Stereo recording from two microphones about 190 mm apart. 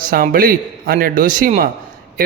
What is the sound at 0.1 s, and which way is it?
Speech, 50° right (ahead or behind).